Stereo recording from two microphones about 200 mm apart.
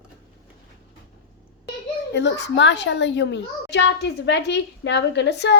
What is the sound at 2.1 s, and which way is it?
A child's voice, 60° left (ahead or behind).